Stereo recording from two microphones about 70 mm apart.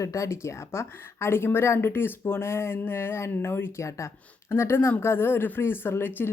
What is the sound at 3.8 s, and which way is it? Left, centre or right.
Speech, left.